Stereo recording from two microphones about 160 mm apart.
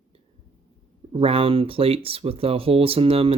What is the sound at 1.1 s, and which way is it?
Speech, 35° right (ahead or behind).